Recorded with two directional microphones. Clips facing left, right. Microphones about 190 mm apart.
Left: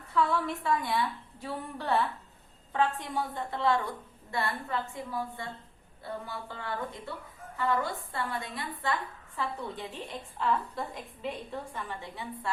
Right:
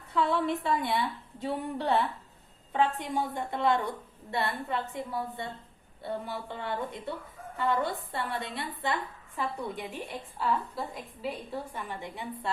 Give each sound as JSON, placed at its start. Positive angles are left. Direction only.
{"t": 0.1, "sound": "a woman's voice", "side_deg": -20}